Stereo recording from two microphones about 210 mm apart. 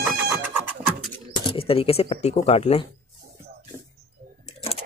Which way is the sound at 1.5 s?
25° left (ahead or behind).